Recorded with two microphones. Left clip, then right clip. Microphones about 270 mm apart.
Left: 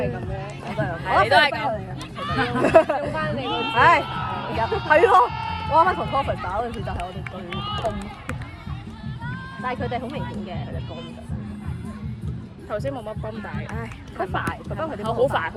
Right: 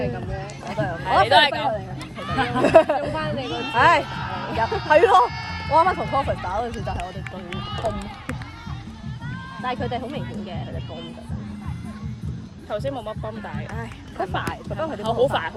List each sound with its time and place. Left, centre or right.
0.7 s a sound: right
2.4 s speech: right
5.3 s a sound: centre
5.7 s speech: right
7.5 s run: centre
9.6 s speech: right
12.7 s speech: right